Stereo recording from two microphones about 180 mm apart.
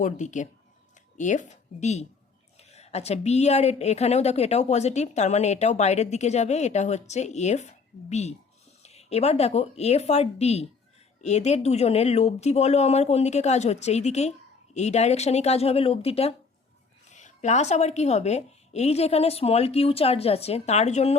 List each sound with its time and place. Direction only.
0.0 s a woman's voice: 45° left (ahead or behind)